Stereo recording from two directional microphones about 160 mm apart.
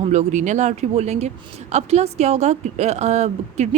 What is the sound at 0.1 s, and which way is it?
A woman's voice, 45° right (ahead or behind).